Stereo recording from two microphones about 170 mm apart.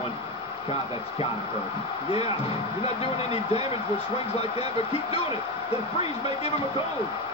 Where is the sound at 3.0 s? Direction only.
35° left (ahead or behind).